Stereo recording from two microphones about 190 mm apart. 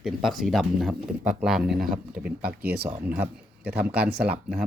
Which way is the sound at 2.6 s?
60° right (ahead or behind).